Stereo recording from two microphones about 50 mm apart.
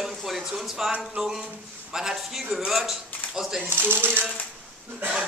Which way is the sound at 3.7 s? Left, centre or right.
Right.